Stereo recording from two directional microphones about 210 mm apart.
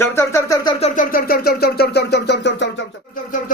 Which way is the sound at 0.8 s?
40° left (ahead or behind).